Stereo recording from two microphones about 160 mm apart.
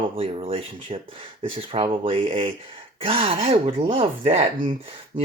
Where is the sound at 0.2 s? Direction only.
35° right (ahead or behind).